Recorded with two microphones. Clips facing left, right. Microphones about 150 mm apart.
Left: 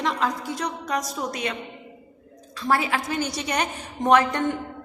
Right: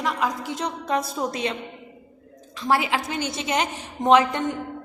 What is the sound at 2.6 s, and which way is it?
A woman's voice, 20° right (ahead or behind).